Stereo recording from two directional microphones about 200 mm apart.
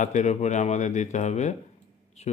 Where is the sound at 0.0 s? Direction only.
35° left (ahead or behind).